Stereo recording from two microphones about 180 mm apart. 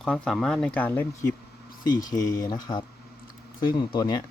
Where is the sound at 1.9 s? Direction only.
20° left (ahead or behind).